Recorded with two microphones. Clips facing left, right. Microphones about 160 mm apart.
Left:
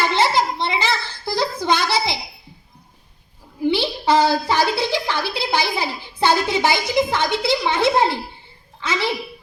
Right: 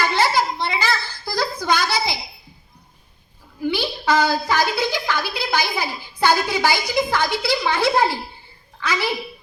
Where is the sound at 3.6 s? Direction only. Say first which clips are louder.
Left 3 dB; 25° left (ahead or behind).